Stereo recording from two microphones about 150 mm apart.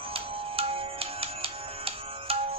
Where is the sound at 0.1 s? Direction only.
40° right (ahead or behind).